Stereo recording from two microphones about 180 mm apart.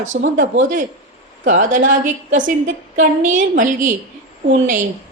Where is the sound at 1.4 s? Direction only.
45° right (ahead or behind).